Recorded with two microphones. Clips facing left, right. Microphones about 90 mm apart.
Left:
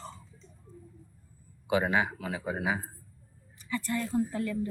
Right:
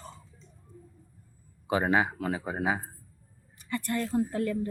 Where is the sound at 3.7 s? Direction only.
55° right (ahead or behind).